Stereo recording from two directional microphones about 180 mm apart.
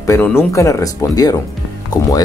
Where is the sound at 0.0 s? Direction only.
15° left (ahead or behind).